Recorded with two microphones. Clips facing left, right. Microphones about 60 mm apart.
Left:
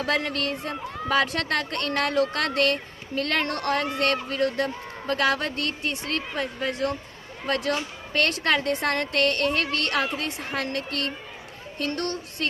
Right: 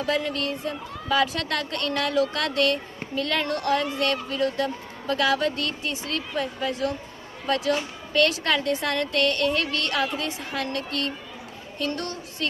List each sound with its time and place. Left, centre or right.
0.0 s speech: left